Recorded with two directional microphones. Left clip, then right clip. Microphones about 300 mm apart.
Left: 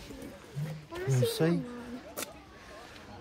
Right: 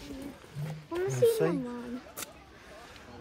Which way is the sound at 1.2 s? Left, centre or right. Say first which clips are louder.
Right 4 dB; centre.